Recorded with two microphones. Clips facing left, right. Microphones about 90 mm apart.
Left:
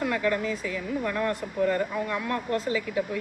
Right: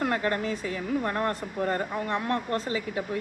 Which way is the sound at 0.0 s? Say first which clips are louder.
Left 1 dB; 45° right (ahead or behind).